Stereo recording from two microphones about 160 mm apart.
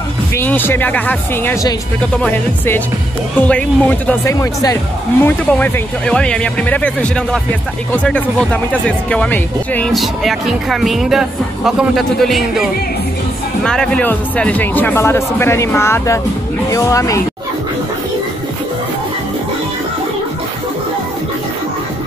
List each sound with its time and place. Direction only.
0.4 s speech: 15° left (ahead or behind)
5.2 s speech: 10° left (ahead or behind)